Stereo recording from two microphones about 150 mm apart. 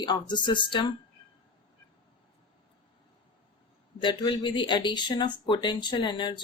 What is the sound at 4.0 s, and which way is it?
Speech, 30° left (ahead or behind).